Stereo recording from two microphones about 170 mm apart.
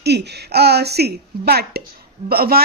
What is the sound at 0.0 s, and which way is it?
A woman's voice, 80° right.